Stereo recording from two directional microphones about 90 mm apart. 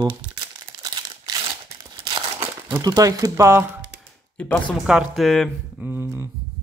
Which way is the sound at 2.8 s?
40° right (ahead or behind).